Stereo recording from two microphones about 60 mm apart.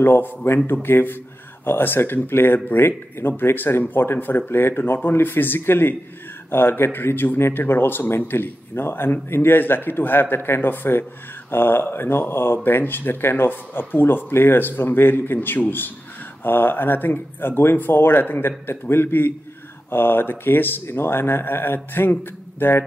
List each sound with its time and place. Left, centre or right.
0.0 s speech: left